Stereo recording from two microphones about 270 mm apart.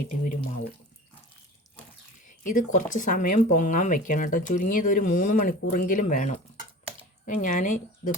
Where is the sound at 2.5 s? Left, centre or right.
Left.